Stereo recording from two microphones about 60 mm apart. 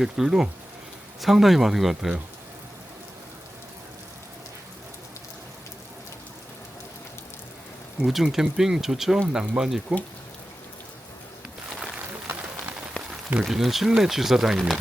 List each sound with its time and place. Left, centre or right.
0.0 s speech: centre
8.0 s speech: centre
12.3 s a sound: right
13.4 s speech: centre